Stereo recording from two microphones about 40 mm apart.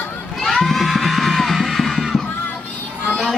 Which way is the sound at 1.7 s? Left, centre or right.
Centre.